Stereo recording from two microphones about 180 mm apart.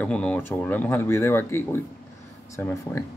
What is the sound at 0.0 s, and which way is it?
Speech, 5° left (ahead or behind).